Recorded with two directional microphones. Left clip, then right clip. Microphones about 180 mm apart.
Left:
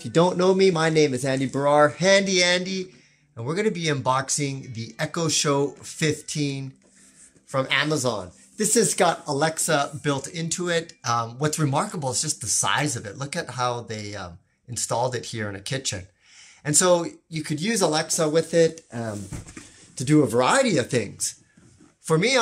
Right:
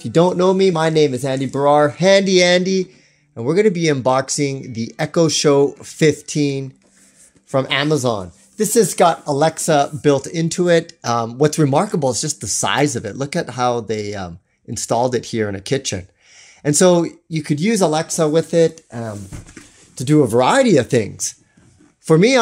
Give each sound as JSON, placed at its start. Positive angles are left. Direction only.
{"t": 0.0, "sound": "speech", "side_deg": -25}